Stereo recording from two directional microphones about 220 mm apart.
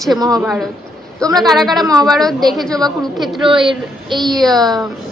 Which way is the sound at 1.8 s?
15° right (ahead or behind).